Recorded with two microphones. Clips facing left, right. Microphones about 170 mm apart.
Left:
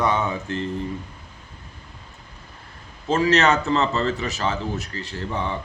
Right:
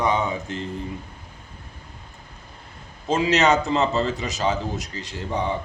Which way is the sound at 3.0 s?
15° right (ahead or behind).